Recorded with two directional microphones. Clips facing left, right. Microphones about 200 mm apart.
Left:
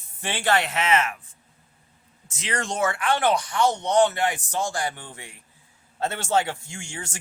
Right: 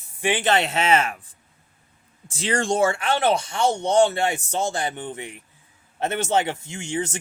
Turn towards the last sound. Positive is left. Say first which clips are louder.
# right 10 dB
turn(degrees=-20)  # may be behind; listen again after turning